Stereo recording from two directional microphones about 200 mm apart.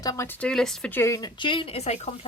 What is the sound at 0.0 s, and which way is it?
Speech, 15° left (ahead or behind).